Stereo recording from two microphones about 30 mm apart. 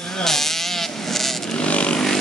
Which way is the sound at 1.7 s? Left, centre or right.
Left.